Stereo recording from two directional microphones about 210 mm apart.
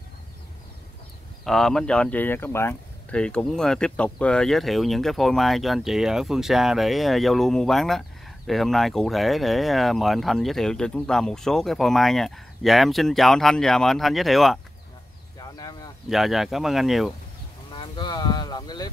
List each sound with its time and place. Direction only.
1.4 s speech: centre (ahead or behind)
15.3 s a sound: 15° left (ahead or behind)
16.1 s speech: centre (ahead or behind)
17.7 s speech: 20° left (ahead or behind)